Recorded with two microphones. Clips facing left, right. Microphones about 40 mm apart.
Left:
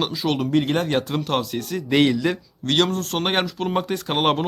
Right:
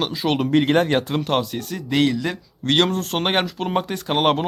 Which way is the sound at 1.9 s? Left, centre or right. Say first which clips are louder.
Left 1 dB; centre.